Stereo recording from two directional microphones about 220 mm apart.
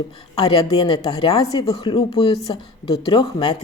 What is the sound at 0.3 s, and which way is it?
A woman's voice, 20° left (ahead or behind).